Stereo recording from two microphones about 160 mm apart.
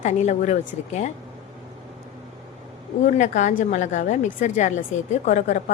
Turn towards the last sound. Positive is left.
turn(degrees=50)  # may be behind; listen again after turning